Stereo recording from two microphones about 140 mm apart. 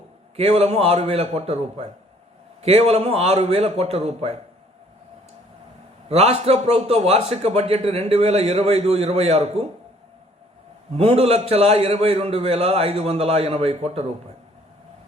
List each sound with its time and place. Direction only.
0.3 s a man's voice: 45° right (ahead or behind)
6.1 s a man's voice: 50° right (ahead or behind)
10.9 s a man's voice: 45° right (ahead or behind)